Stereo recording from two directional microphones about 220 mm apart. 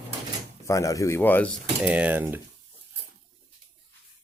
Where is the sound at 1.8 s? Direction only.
5° right (ahead or behind).